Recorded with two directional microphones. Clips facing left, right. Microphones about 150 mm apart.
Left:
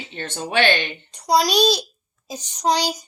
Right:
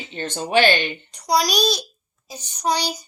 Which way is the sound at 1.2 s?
25° left (ahead or behind).